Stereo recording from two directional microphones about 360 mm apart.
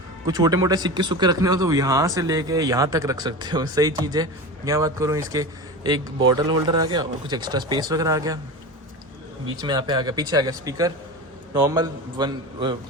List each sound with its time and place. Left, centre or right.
0.3 s speech: centre
9.6 s speech: centre